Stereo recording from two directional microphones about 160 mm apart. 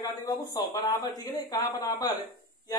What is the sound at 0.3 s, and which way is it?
A man's voice, 20° left (ahead or behind).